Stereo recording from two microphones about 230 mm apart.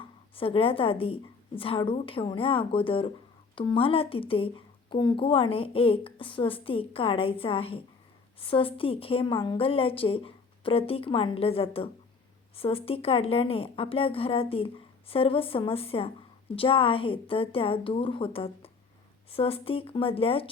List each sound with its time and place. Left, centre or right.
0.0 s a woman's voice: left